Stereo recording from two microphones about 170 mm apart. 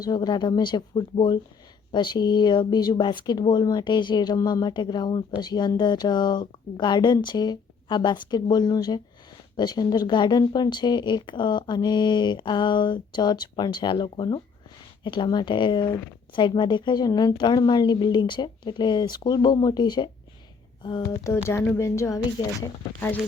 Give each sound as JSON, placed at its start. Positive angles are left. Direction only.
{"t": 0.0, "sound": "speech", "side_deg": 25}